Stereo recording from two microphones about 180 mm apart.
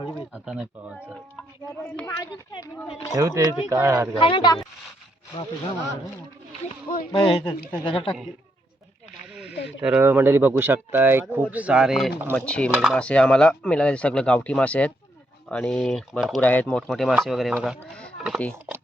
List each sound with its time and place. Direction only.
0.3 s speech: 5° right (ahead or behind)
1.8 s a woman's voice: 15° left (ahead or behind)
3.2 s speech: 20° right (ahead or behind)
4.1 s a woman's voice: 30° left (ahead or behind)
7.1 s a woman's voice: 25° left (ahead or behind)
9.3 s a sound: 5° right (ahead or behind)
9.8 s speech: 10° right (ahead or behind)